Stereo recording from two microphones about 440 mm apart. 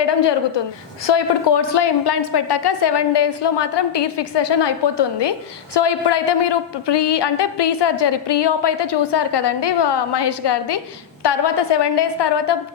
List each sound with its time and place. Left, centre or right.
0.0 s a woman's voice: left